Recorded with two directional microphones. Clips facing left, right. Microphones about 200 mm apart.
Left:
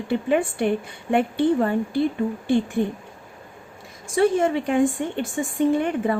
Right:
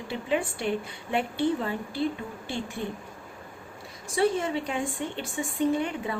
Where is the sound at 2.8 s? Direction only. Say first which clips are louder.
Left 10 dB; 60° left (ahead or behind).